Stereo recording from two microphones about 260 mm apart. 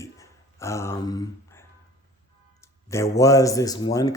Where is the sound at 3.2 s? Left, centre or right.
Centre.